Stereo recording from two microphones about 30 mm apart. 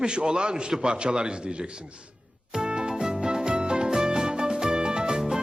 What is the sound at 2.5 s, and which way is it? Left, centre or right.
Music, right.